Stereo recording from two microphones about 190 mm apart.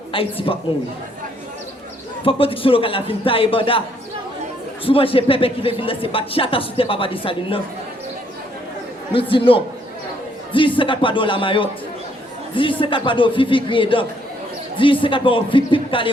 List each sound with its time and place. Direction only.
0.1 s speech: 30° left (ahead or behind)
2.2 s speech: 30° left (ahead or behind)
4.9 s speech: 30° left (ahead or behind)
9.3 s speech: 25° left (ahead or behind)
12.8 s speech: 25° left (ahead or behind)